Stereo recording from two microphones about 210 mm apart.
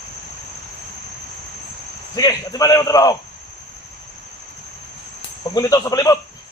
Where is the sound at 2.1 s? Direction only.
20° left (ahead or behind).